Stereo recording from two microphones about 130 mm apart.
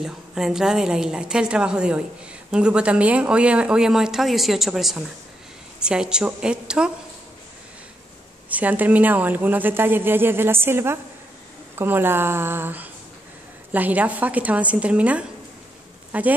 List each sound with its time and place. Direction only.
0.0 s a woman's voice: 5° right (ahead or behind)
8.5 s speech: 10° right (ahead or behind)